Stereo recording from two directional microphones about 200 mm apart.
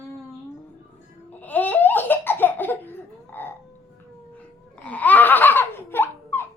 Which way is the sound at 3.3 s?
10° left (ahead or behind).